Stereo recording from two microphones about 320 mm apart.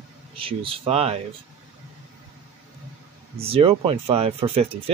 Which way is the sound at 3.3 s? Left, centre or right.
Centre.